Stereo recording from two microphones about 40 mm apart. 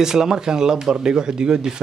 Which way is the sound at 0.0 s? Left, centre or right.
Centre.